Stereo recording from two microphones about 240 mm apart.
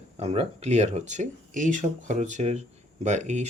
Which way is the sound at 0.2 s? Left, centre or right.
Right.